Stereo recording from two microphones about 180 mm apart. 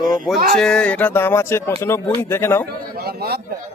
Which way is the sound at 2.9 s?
60° right (ahead or behind).